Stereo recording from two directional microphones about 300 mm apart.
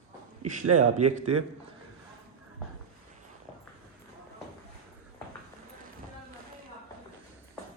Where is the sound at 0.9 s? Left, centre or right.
Right.